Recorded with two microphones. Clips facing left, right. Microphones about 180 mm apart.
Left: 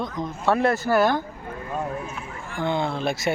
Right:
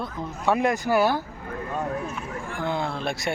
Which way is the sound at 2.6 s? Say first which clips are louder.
Left 4 dB; centre (ahead or behind).